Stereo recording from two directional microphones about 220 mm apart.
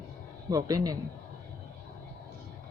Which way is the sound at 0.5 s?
15° right (ahead or behind).